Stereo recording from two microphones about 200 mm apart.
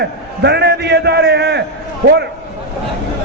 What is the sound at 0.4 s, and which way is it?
A man's voice, 55° right (ahead or behind).